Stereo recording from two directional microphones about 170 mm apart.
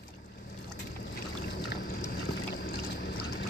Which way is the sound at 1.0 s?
70° left (ahead or behind).